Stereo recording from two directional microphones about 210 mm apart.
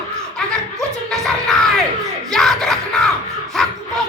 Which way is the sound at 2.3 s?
Centre (ahead or behind).